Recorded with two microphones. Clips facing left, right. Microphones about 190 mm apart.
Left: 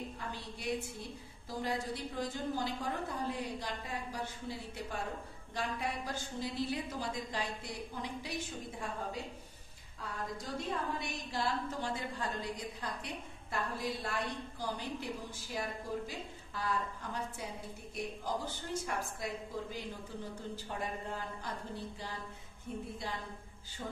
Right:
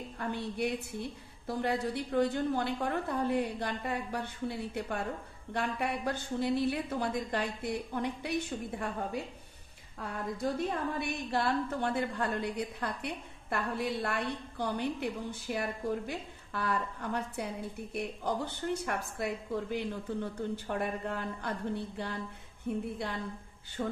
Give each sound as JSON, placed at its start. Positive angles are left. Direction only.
{"t": 0.2, "sound": "a woman's voice", "side_deg": -60}